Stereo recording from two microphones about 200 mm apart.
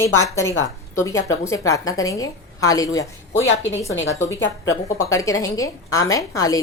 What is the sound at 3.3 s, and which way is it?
Speech, 70° left (ahead or behind).